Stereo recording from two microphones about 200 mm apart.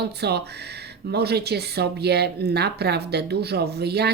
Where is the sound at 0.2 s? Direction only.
55° right (ahead or behind).